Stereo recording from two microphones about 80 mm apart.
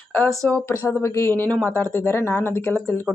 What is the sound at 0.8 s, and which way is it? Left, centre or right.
Speech, left.